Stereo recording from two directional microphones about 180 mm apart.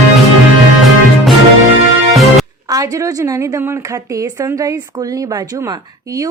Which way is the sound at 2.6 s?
20° right (ahead or behind).